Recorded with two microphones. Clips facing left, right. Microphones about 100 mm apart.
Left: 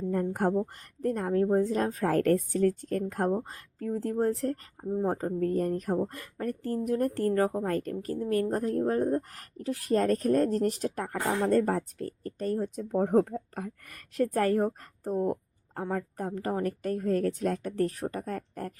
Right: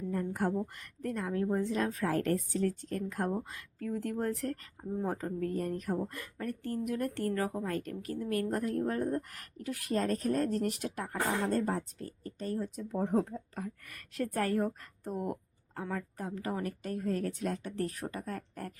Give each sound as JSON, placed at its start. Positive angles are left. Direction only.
{"t": 0.1, "sound": "speech", "side_deg": 50}
{"t": 0.5, "sound": "a woman's voice", "side_deg": 30}
{"t": 10.0, "sound": "speech", "side_deg": 45}